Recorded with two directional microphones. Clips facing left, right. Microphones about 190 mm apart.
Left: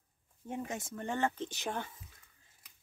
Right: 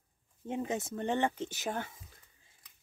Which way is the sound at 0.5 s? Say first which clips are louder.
Right 5 dB; 20° right (ahead or behind).